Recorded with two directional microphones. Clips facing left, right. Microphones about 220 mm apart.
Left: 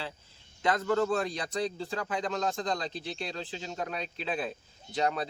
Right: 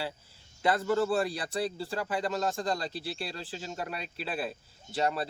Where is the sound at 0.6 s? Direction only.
10° right (ahead or behind).